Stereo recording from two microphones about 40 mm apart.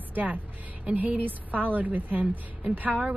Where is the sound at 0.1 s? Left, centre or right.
Right.